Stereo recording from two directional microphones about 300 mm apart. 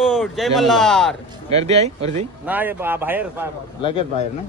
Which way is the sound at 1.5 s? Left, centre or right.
Right.